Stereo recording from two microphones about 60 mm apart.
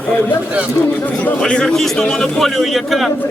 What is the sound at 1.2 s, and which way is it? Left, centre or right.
A man's voice, centre.